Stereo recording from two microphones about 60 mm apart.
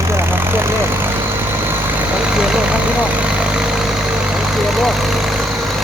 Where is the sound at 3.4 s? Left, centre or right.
Centre.